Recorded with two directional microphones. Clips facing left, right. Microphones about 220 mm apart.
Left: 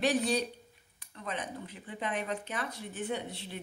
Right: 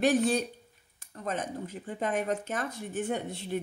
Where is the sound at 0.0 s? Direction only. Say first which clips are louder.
Right 4 dB; 50° right (ahead or behind).